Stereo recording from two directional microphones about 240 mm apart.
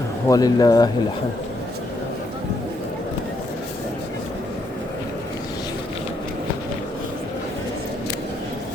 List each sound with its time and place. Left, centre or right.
0.3 s speech: centre